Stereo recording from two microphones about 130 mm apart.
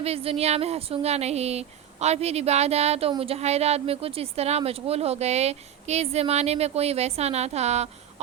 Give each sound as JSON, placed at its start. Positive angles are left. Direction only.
{"t": 0.0, "sound": "a woman's voice", "side_deg": -50}